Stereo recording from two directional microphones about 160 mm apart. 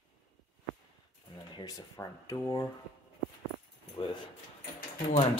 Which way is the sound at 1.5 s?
25° left (ahead or behind).